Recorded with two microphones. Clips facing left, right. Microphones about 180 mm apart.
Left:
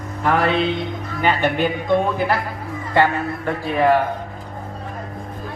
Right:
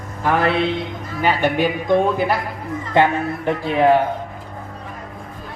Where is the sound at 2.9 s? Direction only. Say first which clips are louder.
Right 1 dB; 20° right (ahead or behind).